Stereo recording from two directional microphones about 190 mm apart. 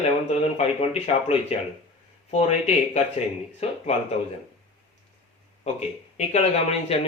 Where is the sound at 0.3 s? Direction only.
35° left (ahead or behind).